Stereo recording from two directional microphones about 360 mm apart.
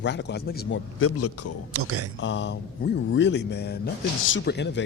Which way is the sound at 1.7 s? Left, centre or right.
Right.